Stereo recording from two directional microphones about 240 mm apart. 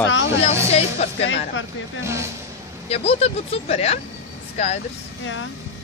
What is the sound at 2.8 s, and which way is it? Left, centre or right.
Speech, left.